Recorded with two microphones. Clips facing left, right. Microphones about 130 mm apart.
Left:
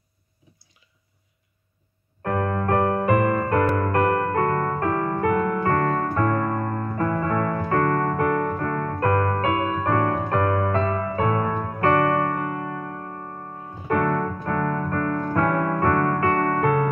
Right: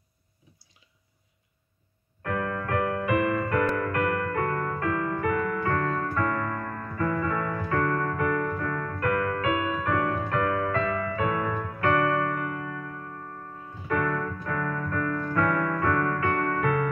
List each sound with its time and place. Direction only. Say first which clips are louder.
2.2 s music: left 6 dB; 35° left (ahead or behind)
13.8 s keyboard: left 5 dB; 40° left (ahead or behind)